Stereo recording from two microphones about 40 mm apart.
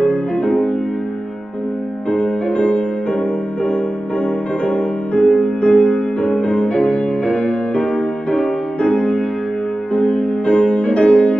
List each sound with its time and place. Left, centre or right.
0.0 s music: left
2.0 s music: left
4.6 s music: left
8.8 s music: left